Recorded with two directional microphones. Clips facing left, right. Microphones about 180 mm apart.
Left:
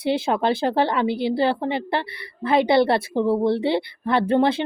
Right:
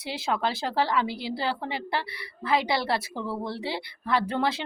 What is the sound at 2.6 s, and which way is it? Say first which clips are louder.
Speech: left 10 dB; 55° left (ahead or behind).